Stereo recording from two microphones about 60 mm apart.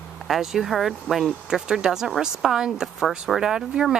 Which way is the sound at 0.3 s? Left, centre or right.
Centre.